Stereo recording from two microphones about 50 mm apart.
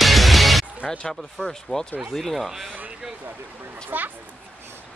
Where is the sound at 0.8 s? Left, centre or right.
Centre.